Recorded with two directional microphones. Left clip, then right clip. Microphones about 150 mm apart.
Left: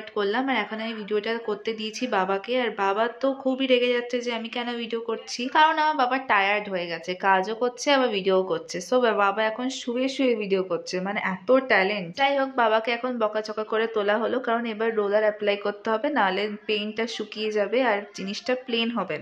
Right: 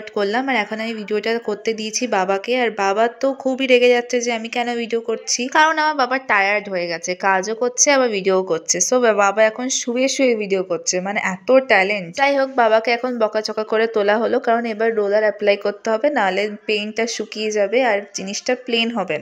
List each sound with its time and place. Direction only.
0.1 s speech: 35° right (ahead or behind)